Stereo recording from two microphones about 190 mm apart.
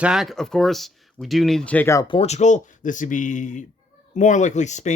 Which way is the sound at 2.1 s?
35° left (ahead or behind).